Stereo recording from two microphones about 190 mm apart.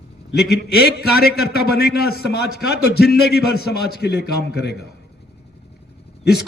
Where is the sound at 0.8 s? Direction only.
60° left (ahead or behind).